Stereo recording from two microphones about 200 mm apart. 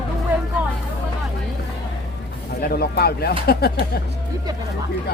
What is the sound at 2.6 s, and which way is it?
Speech, 50° left (ahead or behind).